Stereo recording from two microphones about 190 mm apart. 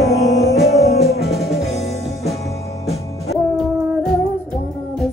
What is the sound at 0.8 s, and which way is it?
Music, 55° left (ahead or behind).